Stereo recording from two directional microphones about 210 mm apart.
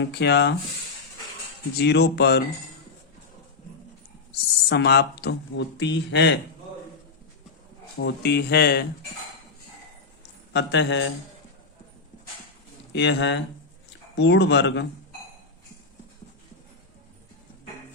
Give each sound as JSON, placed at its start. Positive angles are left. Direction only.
{"t": 0.0, "sound": "speech", "side_deg": 50}
{"t": 1.8, "sound": "speech", "side_deg": 50}
{"t": 4.3, "sound": "speech", "side_deg": 50}
{"t": 7.9, "sound": "speech", "side_deg": 50}
{"t": 10.5, "sound": "speech", "side_deg": 55}
{"t": 12.9, "sound": "speech", "side_deg": 55}